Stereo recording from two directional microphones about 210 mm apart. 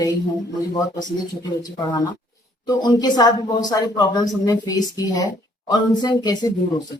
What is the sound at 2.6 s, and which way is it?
Speech, 20° left (ahead or behind).